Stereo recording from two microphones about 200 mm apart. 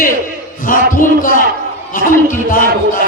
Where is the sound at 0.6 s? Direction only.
40° left (ahead or behind).